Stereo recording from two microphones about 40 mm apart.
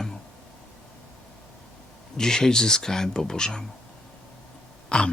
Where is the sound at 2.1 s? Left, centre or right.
Centre.